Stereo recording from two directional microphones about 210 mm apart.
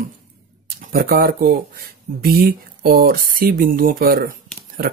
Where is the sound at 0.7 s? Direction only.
45° right (ahead or behind).